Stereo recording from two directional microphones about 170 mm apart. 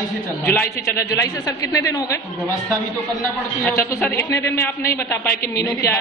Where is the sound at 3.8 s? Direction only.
15° left (ahead or behind).